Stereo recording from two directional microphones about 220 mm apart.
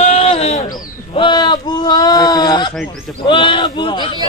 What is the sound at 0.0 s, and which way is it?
Bird, 30° left (ahead or behind).